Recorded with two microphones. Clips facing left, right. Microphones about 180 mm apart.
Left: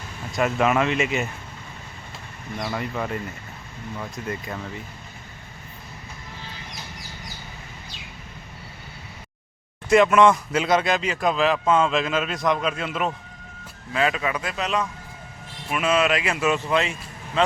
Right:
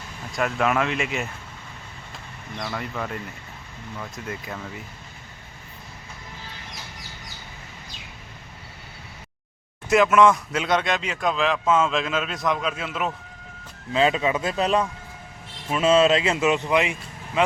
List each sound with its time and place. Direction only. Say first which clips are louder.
0.3 s speech: left 2 dB; centre (ahead or behind)
2.7 s speech: left 3 dB; 5° left (ahead or behind)
9.9 s speech: left 1 dB; centre (ahead or behind)
13.9 s speech: right 3 dB; 25° right (ahead or behind)